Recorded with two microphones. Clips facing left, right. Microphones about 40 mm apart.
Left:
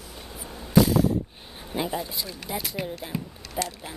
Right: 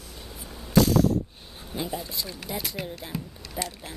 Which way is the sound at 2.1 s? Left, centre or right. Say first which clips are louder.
Left 1 dB; centre.